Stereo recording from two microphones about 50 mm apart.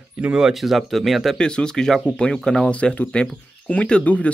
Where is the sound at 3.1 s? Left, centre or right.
Left.